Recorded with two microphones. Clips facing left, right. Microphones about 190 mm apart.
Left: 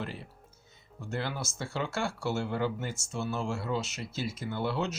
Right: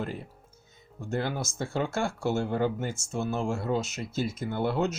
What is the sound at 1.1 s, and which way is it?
Speech, 50° right (ahead or behind).